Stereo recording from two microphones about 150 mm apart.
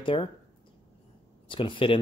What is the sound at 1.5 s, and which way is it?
Speech, 35° left (ahead or behind).